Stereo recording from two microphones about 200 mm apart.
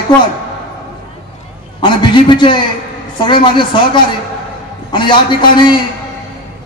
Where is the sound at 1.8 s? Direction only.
25° left (ahead or behind).